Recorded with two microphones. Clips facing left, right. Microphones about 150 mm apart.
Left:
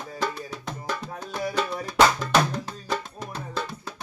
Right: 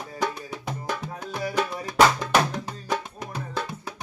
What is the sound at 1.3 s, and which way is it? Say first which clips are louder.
Music: even; 15° right (ahead or behind).